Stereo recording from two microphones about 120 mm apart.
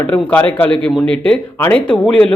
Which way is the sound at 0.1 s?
15° left (ahead or behind).